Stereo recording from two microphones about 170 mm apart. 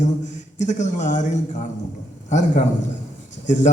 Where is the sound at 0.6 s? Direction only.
45° left (ahead or behind).